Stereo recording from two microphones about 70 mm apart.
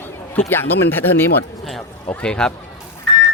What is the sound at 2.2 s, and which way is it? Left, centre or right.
Speech, centre.